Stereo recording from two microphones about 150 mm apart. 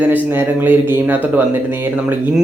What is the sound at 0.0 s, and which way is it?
Speech, 10° right (ahead or behind).